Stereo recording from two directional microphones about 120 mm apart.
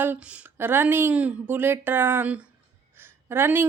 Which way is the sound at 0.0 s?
15° right (ahead or behind).